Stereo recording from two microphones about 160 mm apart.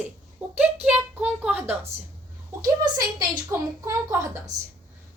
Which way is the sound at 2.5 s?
20° right (ahead or behind).